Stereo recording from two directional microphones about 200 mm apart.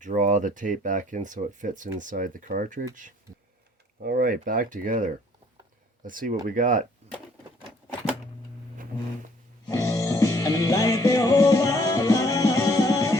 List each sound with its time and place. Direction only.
0.0 s speech: 40° right (ahead or behind)
4.0 s speech: 45° right (ahead or behind)
9.6 s music: 15° left (ahead or behind)